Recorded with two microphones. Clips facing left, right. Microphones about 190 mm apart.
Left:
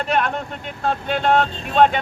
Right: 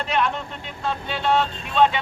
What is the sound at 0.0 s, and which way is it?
Speech, 50° left (ahead or behind).